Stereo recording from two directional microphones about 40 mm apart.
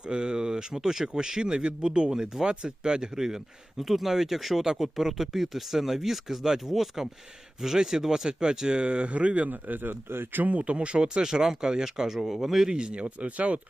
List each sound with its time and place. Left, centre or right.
0.0 s speech: right
9.5 s speech: right
10.4 s speech: right
10.8 s speech: right
11.2 s speech: centre
12.7 s speech: right